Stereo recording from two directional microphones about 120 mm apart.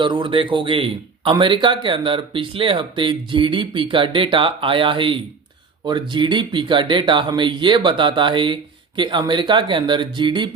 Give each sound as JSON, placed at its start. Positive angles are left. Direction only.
{"t": 0.0, "sound": "speech", "side_deg": -45}